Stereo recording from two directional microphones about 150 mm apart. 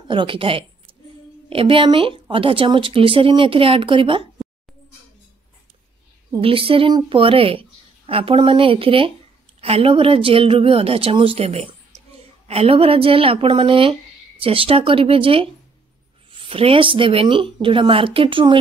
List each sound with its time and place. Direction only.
0.1 s speech: 35° right (ahead or behind)
6.4 s speech: 35° right (ahead or behind)